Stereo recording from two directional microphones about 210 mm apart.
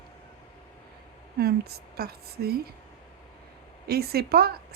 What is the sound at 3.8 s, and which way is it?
Speech, 50° right (ahead or behind).